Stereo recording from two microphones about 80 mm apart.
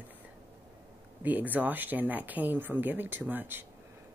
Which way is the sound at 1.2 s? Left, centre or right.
Right.